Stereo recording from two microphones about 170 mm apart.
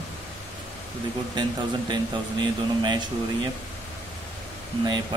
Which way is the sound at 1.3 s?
25° right (ahead or behind).